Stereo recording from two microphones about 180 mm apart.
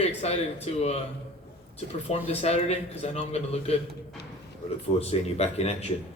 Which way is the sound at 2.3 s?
35° left (ahead or behind).